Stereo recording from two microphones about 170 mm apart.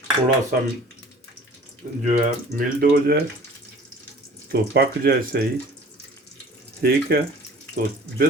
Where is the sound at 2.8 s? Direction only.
65° right (ahead or behind).